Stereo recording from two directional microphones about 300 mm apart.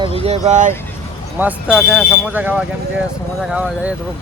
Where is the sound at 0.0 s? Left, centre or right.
Centre.